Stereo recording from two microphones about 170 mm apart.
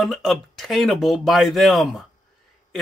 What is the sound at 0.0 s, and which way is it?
Speech, centre (ahead or behind).